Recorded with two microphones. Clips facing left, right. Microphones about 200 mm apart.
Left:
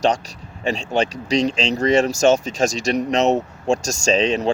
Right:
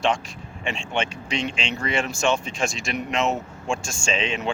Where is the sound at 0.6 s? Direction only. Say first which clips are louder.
Left 7 dB; 40° left (ahead or behind).